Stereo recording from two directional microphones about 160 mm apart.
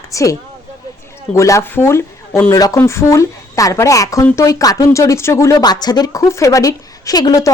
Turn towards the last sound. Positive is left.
turn(degrees=25)  # may be behind; listen again after turning